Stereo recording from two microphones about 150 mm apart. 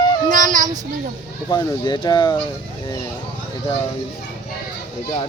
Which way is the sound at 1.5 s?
30° left (ahead or behind).